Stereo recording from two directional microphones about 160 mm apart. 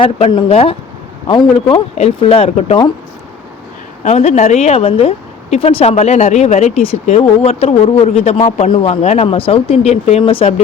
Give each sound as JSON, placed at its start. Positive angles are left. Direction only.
{"t": 0.0, "sound": "a woman's voice", "side_deg": 30}
{"t": 4.0, "sound": "a woman's voice", "side_deg": 45}